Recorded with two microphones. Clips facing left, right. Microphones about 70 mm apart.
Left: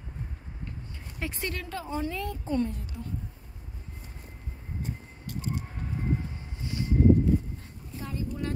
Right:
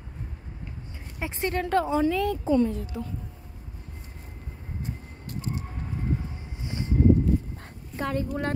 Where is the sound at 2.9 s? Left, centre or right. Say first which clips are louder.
Right 6 dB; right.